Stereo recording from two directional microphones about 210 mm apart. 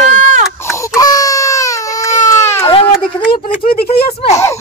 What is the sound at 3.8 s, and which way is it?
Speech, 25° left (ahead or behind).